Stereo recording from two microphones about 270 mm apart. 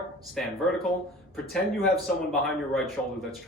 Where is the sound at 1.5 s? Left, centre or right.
Centre.